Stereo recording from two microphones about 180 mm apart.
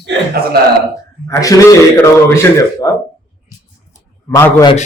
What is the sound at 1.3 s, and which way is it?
A man's voice, 20° left (ahead or behind).